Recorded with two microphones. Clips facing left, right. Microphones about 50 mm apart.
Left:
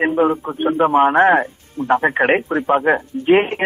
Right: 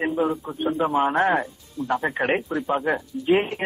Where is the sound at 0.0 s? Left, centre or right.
Left.